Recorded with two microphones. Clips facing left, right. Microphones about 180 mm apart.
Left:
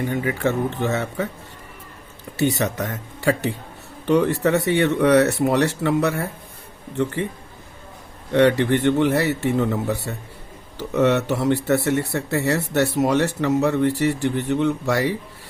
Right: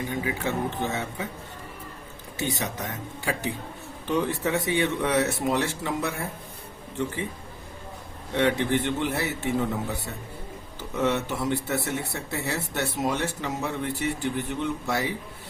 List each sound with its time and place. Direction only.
0.1 s speech: 65° left (ahead or behind)
2.3 s speech: 70° left (ahead or behind)
8.3 s speech: 70° left (ahead or behind)